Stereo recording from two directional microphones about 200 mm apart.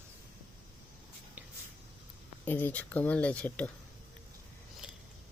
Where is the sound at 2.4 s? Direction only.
10° left (ahead or behind).